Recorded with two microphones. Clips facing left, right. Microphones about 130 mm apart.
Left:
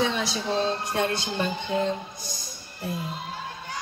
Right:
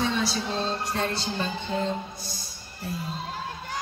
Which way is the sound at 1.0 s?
15° left (ahead or behind).